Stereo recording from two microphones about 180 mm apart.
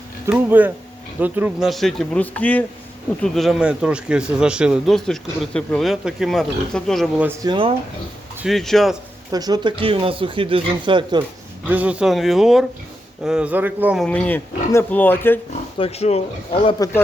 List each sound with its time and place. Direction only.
0.3 s speech: 10° right (ahead or behind)
7.4 s speech: 30° right (ahead or behind)
8.4 s speech: centre (ahead or behind)
9.3 s speech: 20° right (ahead or behind)
11.7 s speech: 10° right (ahead or behind)
14.0 s speech: 5° left (ahead or behind)
15.8 s speech: 35° left (ahead or behind)